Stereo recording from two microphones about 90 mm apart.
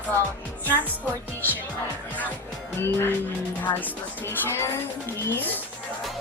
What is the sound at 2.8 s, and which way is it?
A woman's voice, 25° left (ahead or behind).